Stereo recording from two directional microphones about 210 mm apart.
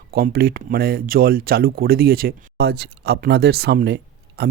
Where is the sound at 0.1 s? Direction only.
45° right (ahead or behind).